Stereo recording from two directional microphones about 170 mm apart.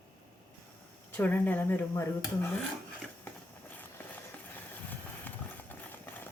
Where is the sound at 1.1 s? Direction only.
10° left (ahead or behind).